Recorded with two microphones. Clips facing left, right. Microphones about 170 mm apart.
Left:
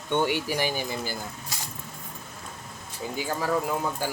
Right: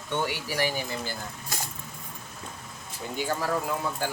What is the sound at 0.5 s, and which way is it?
Speech, 15° left (ahead or behind).